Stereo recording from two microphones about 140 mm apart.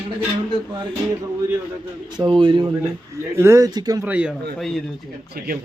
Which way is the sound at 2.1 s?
30° right (ahead or behind).